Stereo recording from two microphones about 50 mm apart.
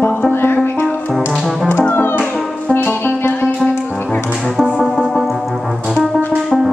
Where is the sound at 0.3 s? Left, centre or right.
Left.